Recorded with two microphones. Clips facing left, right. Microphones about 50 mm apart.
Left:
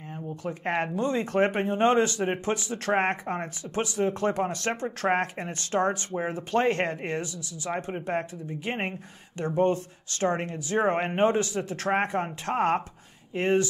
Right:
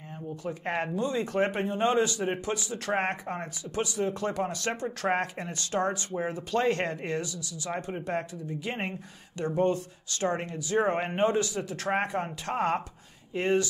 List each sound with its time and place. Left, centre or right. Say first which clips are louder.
0.9 s speech: left 2 dB; left
7.9 s speech: left 2 dB; left